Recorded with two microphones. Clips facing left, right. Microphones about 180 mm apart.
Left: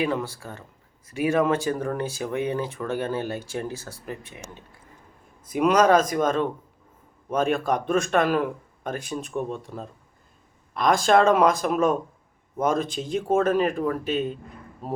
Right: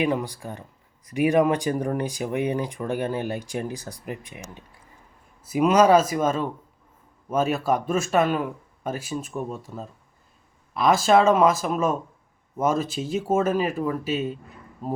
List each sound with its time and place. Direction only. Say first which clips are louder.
0.0 s speech: right 2 dB; 15° right (ahead or behind)
5.5 s speech: right 1 dB; 5° right (ahead or behind)